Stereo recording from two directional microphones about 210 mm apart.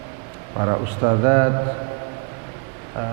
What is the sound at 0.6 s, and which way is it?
Speech, 20° right (ahead or behind).